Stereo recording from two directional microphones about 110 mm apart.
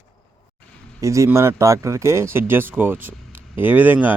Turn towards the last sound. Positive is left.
turn(degrees=-15)  # may be behind; listen again after turning